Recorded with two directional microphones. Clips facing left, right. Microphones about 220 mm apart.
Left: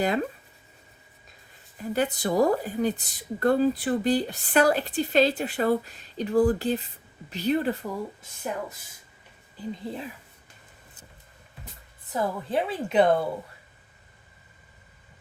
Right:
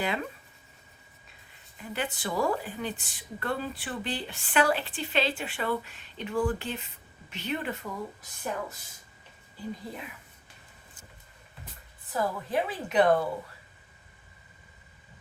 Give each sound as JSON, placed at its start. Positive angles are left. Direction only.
{"t": 0.0, "sound": "a woman's voice", "side_deg": 40}
{"t": 1.8, "sound": "a woman's voice", "side_deg": 40}
{"t": 9.7, "sound": "a woman's voice", "side_deg": 30}
{"t": 12.1, "sound": "a woman's voice", "side_deg": 25}